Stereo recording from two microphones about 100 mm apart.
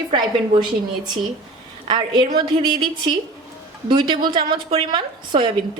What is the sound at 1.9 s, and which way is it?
A woman's voice, 50° right (ahead or behind).